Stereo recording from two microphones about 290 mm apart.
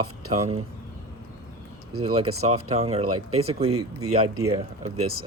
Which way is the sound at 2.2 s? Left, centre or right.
Right.